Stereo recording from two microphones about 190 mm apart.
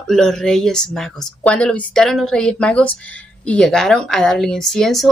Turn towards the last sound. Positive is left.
turn(degrees=0)  # may be behind; listen again after turning